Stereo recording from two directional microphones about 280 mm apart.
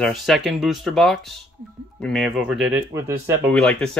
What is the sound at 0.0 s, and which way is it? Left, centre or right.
Speech, centre.